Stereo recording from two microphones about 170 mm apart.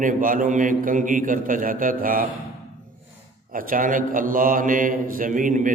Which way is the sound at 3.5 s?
55° right (ahead or behind).